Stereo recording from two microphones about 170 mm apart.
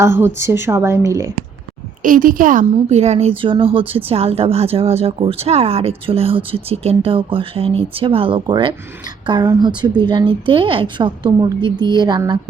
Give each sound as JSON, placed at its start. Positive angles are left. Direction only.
{"t": 0.0, "sound": "a woman's voice", "side_deg": -15}
{"t": 2.0, "sound": "a woman's voice", "side_deg": -50}